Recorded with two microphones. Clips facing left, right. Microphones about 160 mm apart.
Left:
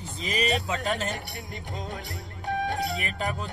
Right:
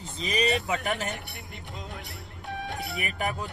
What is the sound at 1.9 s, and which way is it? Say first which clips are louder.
Speech: left 4 dB; 90° left.